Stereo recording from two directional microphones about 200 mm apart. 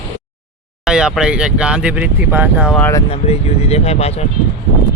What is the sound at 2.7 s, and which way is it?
Speech, 10° left (ahead or behind).